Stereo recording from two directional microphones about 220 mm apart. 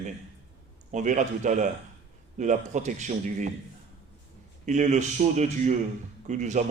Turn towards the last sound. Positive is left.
turn(degrees=-35)  # may be behind; listen again after turning